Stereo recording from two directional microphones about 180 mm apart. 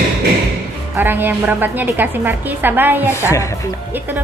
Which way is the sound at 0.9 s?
10° right (ahead or behind).